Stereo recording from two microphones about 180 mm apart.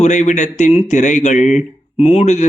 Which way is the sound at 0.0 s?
40° left (ahead or behind).